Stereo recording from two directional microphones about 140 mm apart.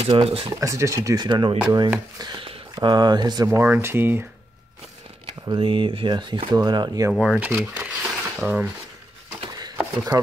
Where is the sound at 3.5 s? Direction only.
15° right (ahead or behind).